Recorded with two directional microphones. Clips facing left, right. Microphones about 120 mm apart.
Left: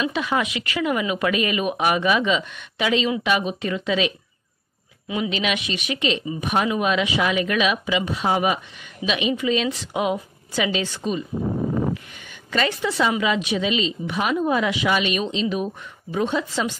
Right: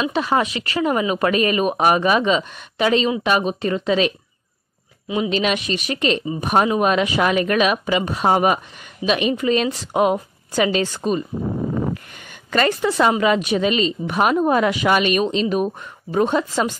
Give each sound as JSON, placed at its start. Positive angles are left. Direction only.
{"t": 0.0, "sound": "speech", "side_deg": -35}
{"t": 5.0, "sound": "a woman's voice", "side_deg": -30}